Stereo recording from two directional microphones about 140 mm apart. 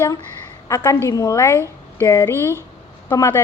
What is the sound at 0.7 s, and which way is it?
A woman's voice, 25° left (ahead or behind).